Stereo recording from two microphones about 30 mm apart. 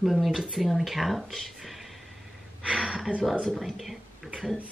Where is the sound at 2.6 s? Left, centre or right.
Right.